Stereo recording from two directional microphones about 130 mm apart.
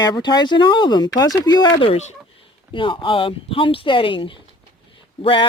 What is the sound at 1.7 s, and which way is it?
Speech, 45° left (ahead or behind).